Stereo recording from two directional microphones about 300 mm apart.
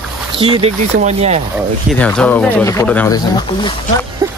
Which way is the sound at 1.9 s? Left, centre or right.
Centre.